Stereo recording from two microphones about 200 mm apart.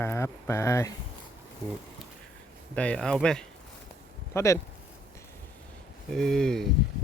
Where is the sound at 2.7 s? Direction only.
5° left (ahead or behind).